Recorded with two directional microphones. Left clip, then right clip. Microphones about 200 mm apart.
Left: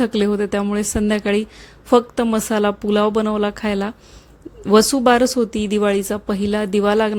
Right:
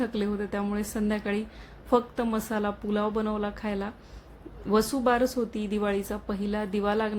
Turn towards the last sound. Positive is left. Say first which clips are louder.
# left 11 dB
turn(degrees=35)  # may be behind; listen again after turning